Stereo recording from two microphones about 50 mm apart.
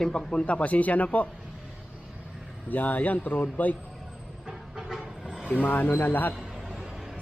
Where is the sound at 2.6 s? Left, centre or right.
Left.